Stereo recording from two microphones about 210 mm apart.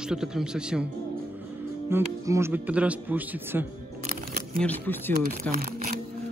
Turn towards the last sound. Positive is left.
turn(degrees=-45)  # may be behind; listen again after turning